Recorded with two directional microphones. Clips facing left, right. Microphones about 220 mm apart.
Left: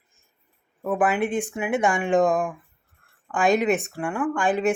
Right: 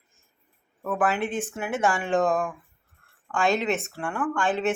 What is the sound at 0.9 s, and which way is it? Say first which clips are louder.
Speech: left 3 dB; 15° left (ahead or behind).